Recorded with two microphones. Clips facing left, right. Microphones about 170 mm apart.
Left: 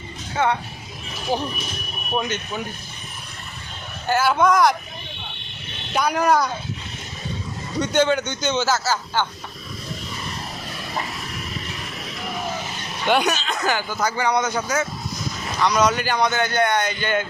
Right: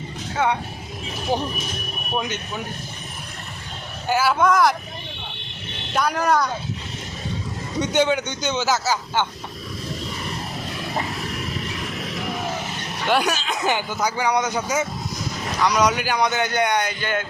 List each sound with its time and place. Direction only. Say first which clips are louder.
0.4 s speech: left 1 dB; 5° right (ahead or behind)
4.1 s speech: left 1 dB; 5° right (ahead or behind)
5.9 s speech: left 1 dB; centre (ahead or behind)
7.8 s speech: left 1 dB; 15° right (ahead or behind)
13.1 s speech: left 1 dB; 5° right (ahead or behind)
13.6 s speech: even; 20° right (ahead or behind); by 17.2 s centre (ahead or behind)